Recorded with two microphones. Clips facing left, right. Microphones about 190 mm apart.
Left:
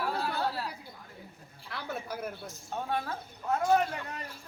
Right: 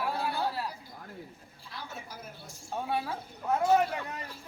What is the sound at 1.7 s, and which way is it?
Speech, 65° left (ahead or behind).